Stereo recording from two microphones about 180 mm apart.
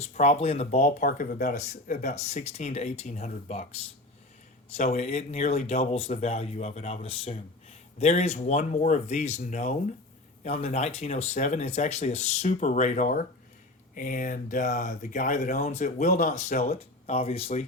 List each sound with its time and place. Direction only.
0.0 s speech: 40° left (ahead or behind)
4.8 s speech: 35° left (ahead or behind)